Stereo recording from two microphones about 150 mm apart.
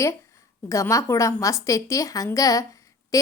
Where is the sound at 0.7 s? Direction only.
20° left (ahead or behind).